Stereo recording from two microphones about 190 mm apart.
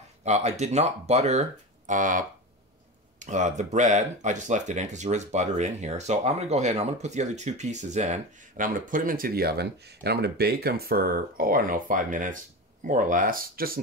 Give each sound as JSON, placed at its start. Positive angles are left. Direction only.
{"t": 0.2, "sound": "speech", "side_deg": -35}